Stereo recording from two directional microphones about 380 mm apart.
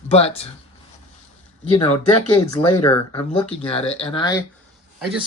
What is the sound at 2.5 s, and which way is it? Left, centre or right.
Speech, centre.